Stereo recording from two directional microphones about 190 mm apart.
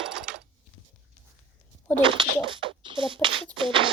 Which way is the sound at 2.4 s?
25° right (ahead or behind).